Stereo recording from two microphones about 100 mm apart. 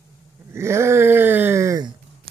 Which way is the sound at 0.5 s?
25° right (ahead or behind).